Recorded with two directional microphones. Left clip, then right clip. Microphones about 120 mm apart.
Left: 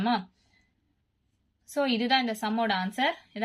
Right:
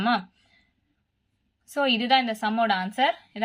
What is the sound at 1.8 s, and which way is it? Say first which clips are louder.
Speech: right 4 dB; 20° right (ahead or behind).